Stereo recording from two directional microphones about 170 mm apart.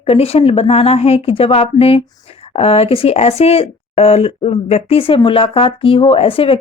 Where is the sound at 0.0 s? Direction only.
35° left (ahead or behind).